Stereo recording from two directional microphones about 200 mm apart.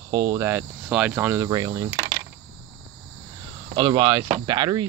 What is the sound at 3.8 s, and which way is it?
Speech, 20° right (ahead or behind).